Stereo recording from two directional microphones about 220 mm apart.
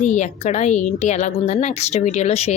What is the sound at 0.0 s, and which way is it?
A woman's voice, 30° left (ahead or behind).